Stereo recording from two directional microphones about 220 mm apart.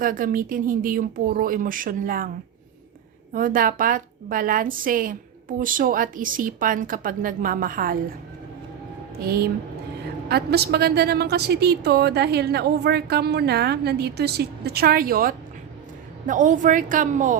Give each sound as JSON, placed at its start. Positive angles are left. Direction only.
{"t": 0.0, "sound": "a woman's voice", "side_deg": -40}
{"t": 3.3, "sound": "a woman's voice", "side_deg": -40}
{"t": 9.2, "sound": "a woman's voice", "side_deg": -45}